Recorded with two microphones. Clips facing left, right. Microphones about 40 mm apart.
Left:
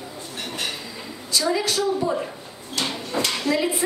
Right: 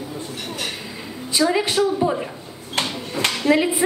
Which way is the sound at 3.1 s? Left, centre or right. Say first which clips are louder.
Right 2 dB; left.